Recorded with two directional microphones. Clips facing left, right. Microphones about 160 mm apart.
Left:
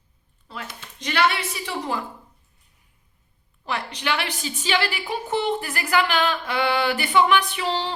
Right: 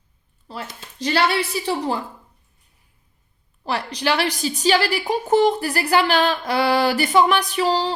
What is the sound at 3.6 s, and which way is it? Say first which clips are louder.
A woman's voice: right 5 dB; 35° right (ahead or behind).